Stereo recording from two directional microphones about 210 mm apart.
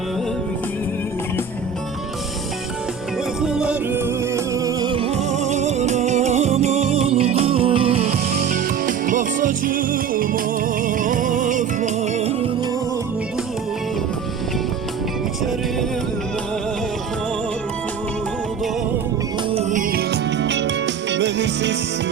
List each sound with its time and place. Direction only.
3.4 s music: 5° right (ahead or behind); by 8.1 s 25° right (ahead or behind)
8.4 s music: 40° right (ahead or behind)
19.5 s music: 35° right (ahead or behind); by 21.8 s 55° right (ahead or behind)